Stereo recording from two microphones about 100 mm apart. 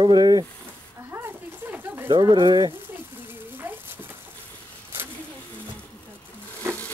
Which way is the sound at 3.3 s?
20° right (ahead or behind).